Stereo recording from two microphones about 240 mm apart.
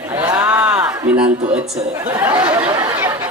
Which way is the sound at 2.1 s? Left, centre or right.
Centre.